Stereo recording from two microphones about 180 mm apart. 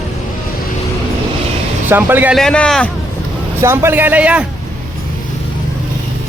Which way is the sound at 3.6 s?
15° right (ahead or behind).